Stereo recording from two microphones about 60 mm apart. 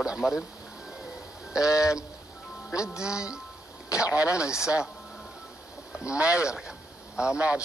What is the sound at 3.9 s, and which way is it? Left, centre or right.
Speech, left.